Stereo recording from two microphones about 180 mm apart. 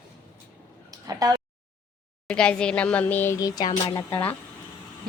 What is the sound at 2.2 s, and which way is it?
A woman's voice, 5° left (ahead or behind).